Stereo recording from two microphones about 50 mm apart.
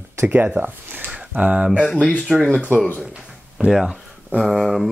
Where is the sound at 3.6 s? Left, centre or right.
Centre.